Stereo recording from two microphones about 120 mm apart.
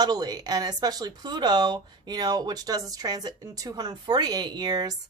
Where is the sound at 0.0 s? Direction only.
35° right (ahead or behind).